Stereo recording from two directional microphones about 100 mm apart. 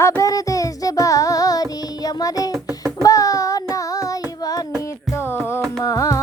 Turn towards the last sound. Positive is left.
turn(degrees=35)  # may be behind; listen again after turning